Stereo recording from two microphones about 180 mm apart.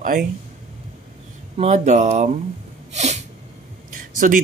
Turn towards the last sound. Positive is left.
turn(degrees=-50)  # may be behind; listen again after turning